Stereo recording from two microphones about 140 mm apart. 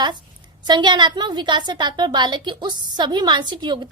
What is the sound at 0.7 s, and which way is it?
A woman's voice, 35° right (ahead or behind).